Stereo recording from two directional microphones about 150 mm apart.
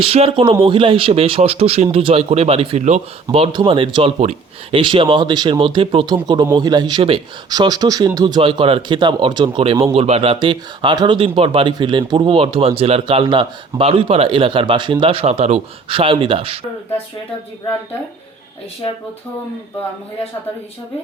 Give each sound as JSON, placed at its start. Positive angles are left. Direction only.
{"t": 0.0, "sound": "speech", "side_deg": -40}
{"t": 3.3, "sound": "speech", "side_deg": -35}
{"t": 4.2, "sound": "speech", "side_deg": -50}
{"t": 4.8, "sound": "speech", "side_deg": -35}